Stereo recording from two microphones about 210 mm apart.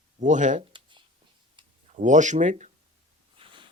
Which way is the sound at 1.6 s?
20° right (ahead or behind).